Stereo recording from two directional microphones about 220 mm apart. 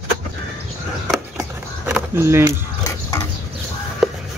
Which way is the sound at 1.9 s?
10° right (ahead or behind).